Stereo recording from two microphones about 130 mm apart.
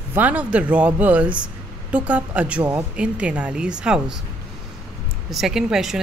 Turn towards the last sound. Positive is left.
turn(degrees=-5)  # may be behind; listen again after turning